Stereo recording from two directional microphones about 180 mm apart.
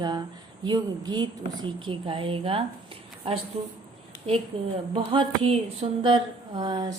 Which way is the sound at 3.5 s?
35° right (ahead or behind).